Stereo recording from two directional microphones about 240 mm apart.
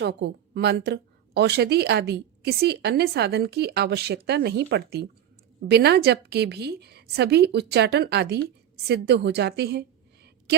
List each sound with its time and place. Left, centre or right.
0.0 s a woman's voice: right